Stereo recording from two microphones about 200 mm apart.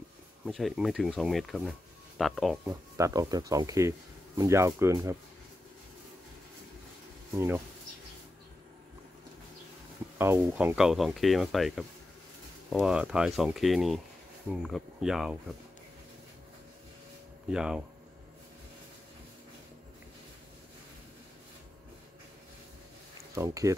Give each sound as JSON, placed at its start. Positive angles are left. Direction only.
{"t": 0.5, "sound": "speech", "side_deg": 0}
{"t": 2.6, "sound": "speech", "side_deg": -15}
{"t": 7.3, "sound": "speech", "side_deg": -15}
{"t": 10.1, "sound": "speech", "side_deg": -10}
{"t": 17.5, "sound": "speech", "side_deg": -5}
{"t": 23.3, "sound": "speech", "side_deg": -15}